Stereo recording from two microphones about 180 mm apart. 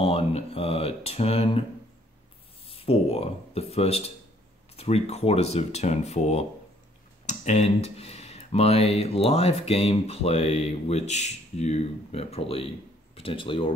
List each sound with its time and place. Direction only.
0.0 s speech: 30° left (ahead or behind)
2.7 s speech: 35° left (ahead or behind)